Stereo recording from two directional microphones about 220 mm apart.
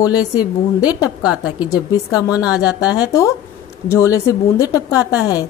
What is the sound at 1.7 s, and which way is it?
A woman's voice, 15° left (ahead or behind).